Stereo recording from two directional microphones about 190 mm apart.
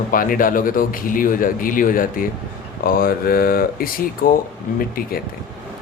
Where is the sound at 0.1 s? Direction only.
45° left (ahead or behind).